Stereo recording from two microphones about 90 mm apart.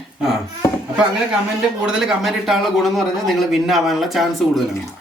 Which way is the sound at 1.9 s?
5° right (ahead or behind).